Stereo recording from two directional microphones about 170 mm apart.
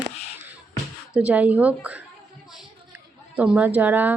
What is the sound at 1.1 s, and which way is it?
Speech, 5° right (ahead or behind).